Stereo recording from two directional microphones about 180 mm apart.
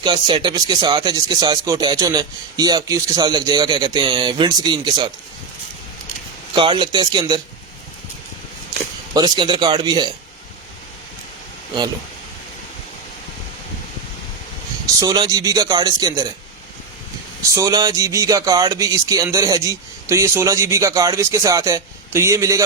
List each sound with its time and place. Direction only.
0.0 s speech: 25° right (ahead or behind)
6.5 s speech: 25° right (ahead or behind)
9.1 s speech: 25° right (ahead or behind)
15.0 s speech: 20° right (ahead or behind)
17.5 s speech: 20° right (ahead or behind)